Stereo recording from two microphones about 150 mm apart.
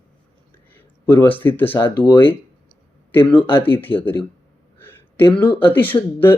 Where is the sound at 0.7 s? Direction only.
15° left (ahead or behind).